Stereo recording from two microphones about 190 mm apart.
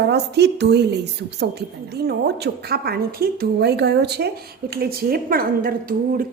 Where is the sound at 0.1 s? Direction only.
60° right (ahead or behind).